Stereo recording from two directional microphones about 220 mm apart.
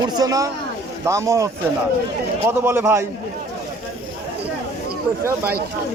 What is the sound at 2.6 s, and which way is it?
Speech, 10° right (ahead or behind).